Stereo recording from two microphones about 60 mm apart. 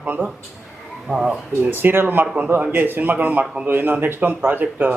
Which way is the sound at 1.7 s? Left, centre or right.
Right.